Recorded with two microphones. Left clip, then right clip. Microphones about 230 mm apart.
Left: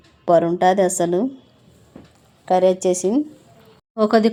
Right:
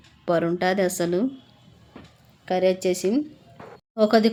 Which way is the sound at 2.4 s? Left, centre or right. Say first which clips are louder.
Left 6 dB; centre.